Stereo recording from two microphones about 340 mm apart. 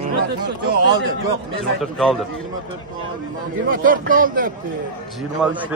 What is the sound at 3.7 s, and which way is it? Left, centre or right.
Speech, right.